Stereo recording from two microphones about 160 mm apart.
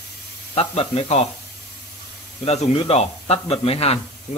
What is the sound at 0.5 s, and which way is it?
Speech, 40° left (ahead or behind).